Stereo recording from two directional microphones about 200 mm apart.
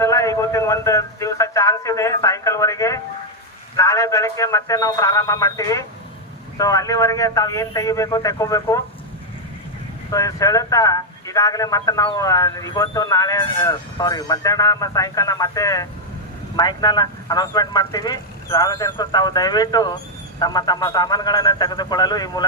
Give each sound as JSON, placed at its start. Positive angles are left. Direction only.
{"t": 0.0, "sound": "a man's voice", "side_deg": 15}
{"t": 10.1, "sound": "a man's voice", "side_deg": 15}